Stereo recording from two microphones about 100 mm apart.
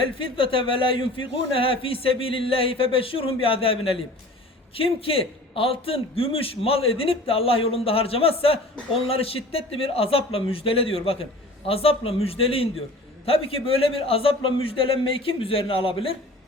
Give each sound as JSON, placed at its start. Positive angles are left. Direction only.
{"t": 0.0, "sound": "a man's voice", "side_deg": 60}